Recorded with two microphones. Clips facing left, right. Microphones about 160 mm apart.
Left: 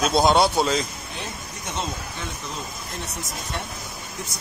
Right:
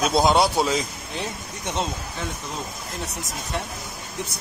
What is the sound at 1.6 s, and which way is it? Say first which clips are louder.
Speech: right 3 dB; 30° right (ahead or behind).